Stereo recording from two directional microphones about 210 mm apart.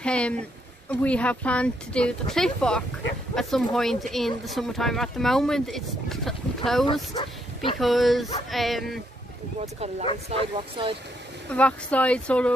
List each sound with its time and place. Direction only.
0.0 s speech: 5° left (ahead or behind)
7.2 s speech: 20° left (ahead or behind)
7.8 s speech: centre (ahead or behind)
9.6 s speech: 30° right (ahead or behind)
11.5 s speech: 5° left (ahead or behind)